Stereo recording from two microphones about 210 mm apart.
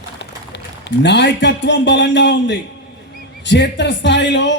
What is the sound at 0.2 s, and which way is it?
A man's voice, 55° left (ahead or behind).